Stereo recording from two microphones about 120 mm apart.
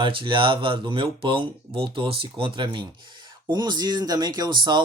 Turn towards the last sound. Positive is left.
turn(degrees=-40)  # may be behind; listen again after turning